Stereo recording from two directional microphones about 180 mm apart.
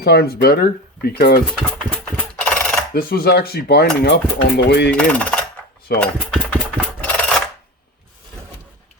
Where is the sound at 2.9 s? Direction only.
55° left (ahead or behind).